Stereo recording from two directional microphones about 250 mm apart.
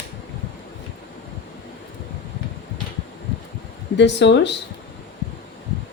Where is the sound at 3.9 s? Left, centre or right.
Left.